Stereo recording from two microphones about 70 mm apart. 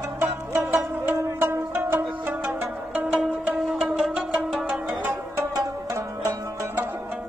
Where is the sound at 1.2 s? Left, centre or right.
Right.